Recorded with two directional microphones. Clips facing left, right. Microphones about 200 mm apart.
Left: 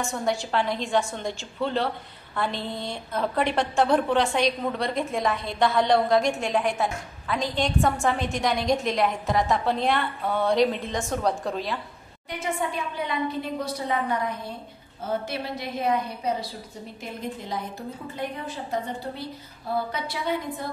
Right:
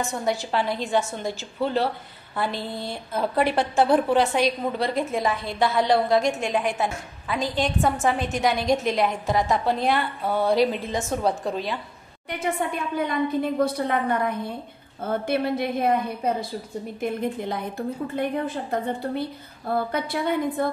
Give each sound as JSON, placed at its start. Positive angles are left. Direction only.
{"t": 0.0, "sound": "a woman's voice", "side_deg": 0}
{"t": 12.3, "sound": "a woman's voice", "side_deg": -60}